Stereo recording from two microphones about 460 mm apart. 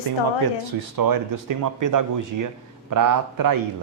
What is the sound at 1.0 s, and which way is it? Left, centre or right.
Speech, right.